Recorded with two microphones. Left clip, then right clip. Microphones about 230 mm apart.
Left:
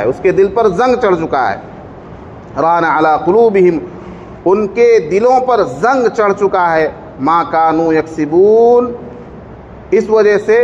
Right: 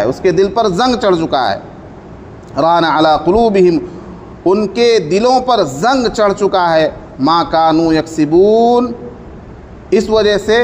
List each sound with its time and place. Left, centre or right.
0.0 s a man's voice: right